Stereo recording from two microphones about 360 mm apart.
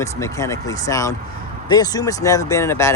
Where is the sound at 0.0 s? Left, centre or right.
Centre.